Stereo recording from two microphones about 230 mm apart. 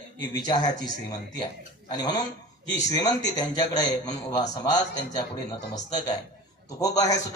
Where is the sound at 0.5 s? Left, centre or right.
Centre.